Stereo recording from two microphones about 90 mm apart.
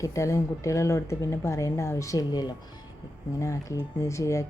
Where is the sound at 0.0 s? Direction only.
35° left (ahead or behind).